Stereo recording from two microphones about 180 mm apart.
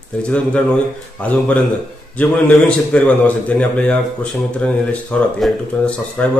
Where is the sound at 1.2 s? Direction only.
10° left (ahead or behind).